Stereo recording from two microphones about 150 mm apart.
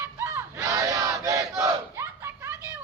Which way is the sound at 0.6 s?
20° right (ahead or behind).